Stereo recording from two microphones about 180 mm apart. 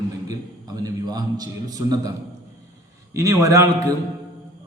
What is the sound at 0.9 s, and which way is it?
A man's voice, 20° right (ahead or behind).